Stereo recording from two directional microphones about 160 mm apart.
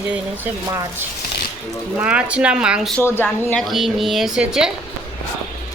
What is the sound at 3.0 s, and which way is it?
Speech, 15° left (ahead or behind).